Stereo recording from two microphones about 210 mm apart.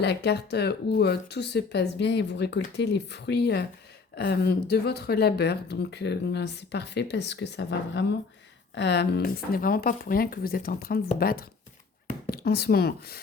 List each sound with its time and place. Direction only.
0.0 s speech: 50° left (ahead or behind)